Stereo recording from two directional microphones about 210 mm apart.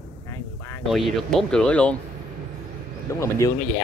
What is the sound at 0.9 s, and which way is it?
Speech, centre (ahead or behind).